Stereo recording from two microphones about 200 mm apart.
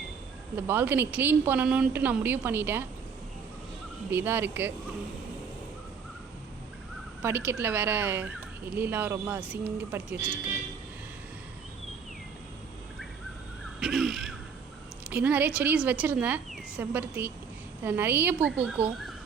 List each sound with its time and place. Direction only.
0.5 s speech: 10° right (ahead or behind)
4.1 s speech: 10° right (ahead or behind)
7.2 s speech: 10° right (ahead or behind)
13.7 s a sound: centre (ahead or behind)
15.1 s speech: 10° right (ahead or behind)